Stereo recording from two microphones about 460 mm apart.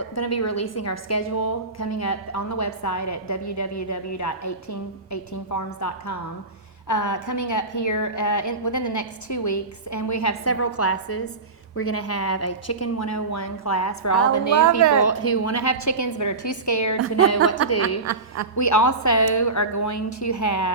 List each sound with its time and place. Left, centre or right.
0.1 s a woman's voice: left
17.8 s a woman's voice: right
18.5 s a woman's voice: left